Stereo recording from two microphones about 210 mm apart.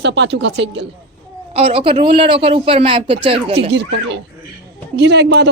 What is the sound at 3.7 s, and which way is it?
Speech, 55° right (ahead or behind).